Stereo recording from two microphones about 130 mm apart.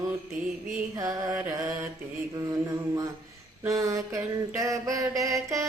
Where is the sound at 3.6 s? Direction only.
25° right (ahead or behind).